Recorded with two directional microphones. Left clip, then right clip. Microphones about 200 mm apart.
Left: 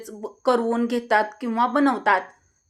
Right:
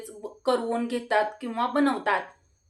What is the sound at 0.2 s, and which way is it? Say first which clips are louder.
Speech: left 5 dB; 40° left (ahead or behind).